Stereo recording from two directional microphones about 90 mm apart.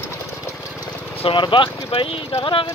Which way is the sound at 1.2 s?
70° left (ahead or behind).